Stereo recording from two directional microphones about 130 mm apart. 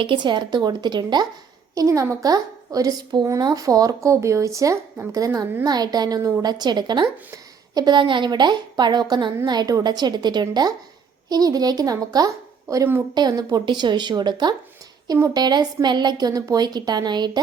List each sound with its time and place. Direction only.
0.0 s a woman's voice: 40° right (ahead or behind)